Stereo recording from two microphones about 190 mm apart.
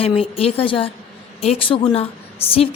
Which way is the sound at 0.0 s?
30° left (ahead or behind).